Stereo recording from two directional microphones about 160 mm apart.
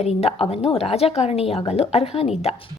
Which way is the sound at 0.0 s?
40° left (ahead or behind).